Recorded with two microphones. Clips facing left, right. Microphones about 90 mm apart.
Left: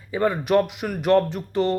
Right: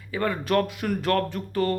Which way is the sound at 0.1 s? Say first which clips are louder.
Left 4 dB; 15° left (ahead or behind).